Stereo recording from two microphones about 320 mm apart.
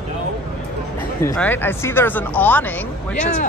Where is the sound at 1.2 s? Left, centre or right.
Centre.